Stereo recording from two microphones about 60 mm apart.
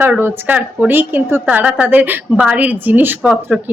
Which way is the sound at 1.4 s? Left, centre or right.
Right.